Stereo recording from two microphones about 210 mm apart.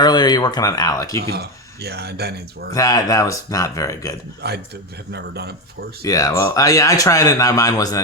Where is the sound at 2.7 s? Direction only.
15° left (ahead or behind).